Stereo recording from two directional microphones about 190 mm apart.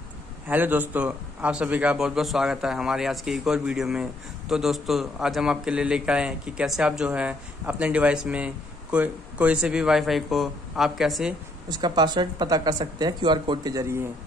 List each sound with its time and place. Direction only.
0.5 s a man's voice: 10° right (ahead or behind)
11.7 s speech: 20° right (ahead or behind)